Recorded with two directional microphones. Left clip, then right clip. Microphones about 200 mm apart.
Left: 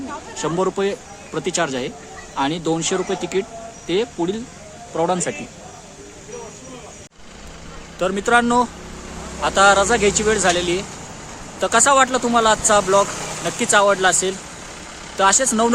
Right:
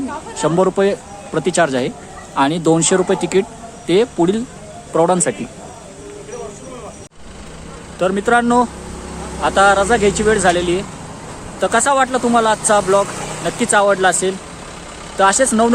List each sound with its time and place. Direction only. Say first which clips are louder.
0.3 s speech: right 6 dB; 15° right (ahead or behind)
7.9 s speech: right 2 dB; 5° left (ahead or behind)